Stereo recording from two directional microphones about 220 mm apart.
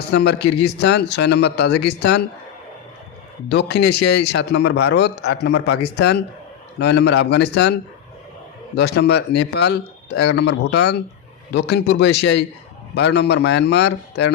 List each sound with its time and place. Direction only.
0.1 s a man's voice: 50° left (ahead or behind)
3.5 s a man's voice: 50° left (ahead or behind)
8.7 s a man's voice: 50° left (ahead or behind)